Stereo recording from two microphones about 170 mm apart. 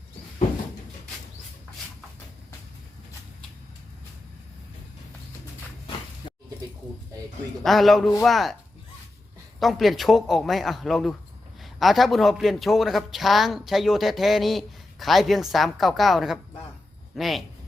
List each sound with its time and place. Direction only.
6.2 s a sound: 30° left (ahead or behind)
7.6 s a man's voice: centre (ahead or behind)
9.6 s a man's voice: centre (ahead or behind)